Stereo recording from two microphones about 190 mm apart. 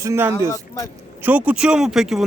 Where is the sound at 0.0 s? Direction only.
15° right (ahead or behind).